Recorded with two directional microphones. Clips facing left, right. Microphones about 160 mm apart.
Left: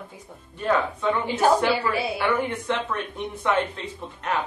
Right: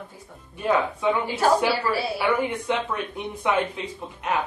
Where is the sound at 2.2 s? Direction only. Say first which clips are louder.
Right 1 dB; 10° right (ahead or behind).